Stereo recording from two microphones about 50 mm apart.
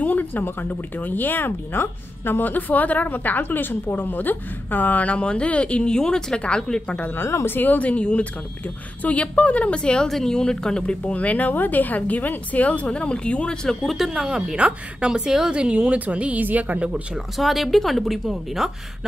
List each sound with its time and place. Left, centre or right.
0.0 s speech: left
7.2 s speech: left
7.4 s a woman's voice: left; by 10.0 s centre
10.0 s speech: centre
10.9 s speech: left
13.7 s a woman's voice: centre; by 16.9 s right
17.4 s speech: centre